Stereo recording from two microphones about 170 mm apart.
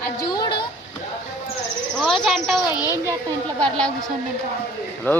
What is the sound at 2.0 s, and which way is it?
Cricket, centre (ahead or behind).